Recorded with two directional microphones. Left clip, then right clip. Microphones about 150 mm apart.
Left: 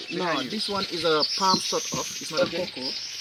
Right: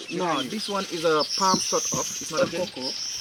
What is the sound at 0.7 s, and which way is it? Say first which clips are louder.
Speech: right 1 dB; 5° left (ahead or behind).